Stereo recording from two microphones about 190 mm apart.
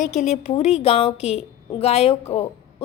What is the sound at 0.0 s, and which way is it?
A woman's voice, 40° left (ahead or behind).